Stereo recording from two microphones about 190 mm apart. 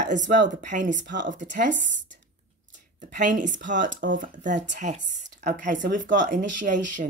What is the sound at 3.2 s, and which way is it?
Speech, 40° right (ahead or behind).